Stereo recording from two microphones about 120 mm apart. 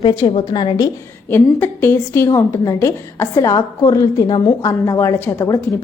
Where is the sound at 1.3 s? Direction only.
20° left (ahead or behind).